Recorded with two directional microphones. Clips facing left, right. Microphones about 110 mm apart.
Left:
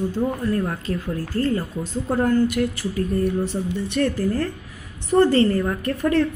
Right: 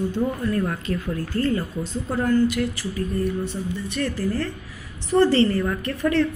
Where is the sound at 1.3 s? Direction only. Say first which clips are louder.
Left 1 dB; 35° left (ahead or behind).